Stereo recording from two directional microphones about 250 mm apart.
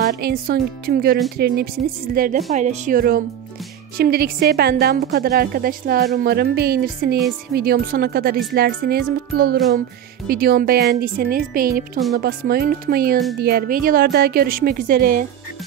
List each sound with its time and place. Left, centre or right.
0.0 s a woman's voice: right